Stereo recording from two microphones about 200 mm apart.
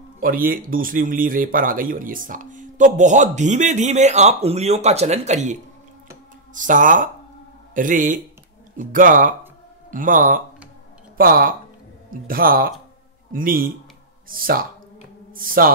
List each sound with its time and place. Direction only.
0.2 s speech: 45° right (ahead or behind)